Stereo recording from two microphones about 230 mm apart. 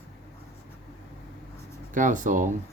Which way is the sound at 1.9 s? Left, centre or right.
Right.